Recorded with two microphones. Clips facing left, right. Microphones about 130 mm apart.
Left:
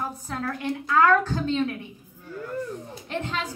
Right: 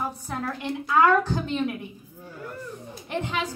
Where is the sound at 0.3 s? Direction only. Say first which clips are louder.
Left 4 dB; 15° right (ahead or behind).